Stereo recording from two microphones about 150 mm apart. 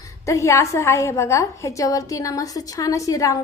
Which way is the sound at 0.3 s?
20° left (ahead or behind).